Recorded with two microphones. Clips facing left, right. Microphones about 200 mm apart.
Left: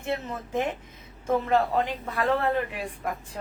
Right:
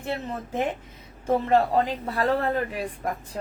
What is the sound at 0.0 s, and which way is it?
A man's voice, 35° right (ahead or behind).